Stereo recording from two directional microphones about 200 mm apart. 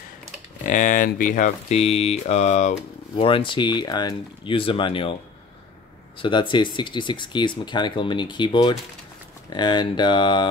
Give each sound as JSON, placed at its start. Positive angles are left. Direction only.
{"t": 0.7, "sound": "speech", "side_deg": 40}
{"t": 6.1, "sound": "speech", "side_deg": 25}